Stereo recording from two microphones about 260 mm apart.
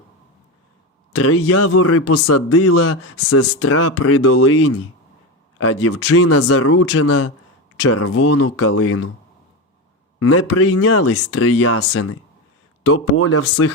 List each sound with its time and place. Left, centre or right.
1.1 s a man's voice: left
10.2 s a man's voice: left